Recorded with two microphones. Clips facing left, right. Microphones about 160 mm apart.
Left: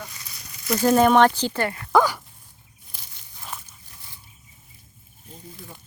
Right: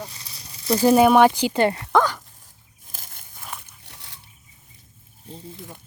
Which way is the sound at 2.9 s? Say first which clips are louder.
Right 4 dB; 50° right (ahead or behind).